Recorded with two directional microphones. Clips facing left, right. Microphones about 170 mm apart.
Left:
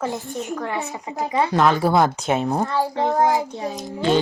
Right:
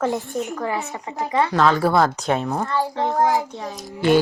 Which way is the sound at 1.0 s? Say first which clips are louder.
Even; 15° left (ahead or behind).